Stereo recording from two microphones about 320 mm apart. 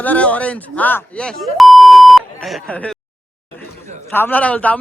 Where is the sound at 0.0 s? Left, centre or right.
Centre.